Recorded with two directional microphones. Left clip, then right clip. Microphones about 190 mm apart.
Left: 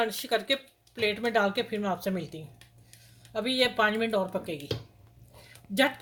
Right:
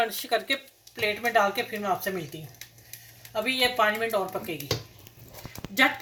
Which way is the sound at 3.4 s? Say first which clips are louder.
Right 2 dB; 65° left (ahead or behind).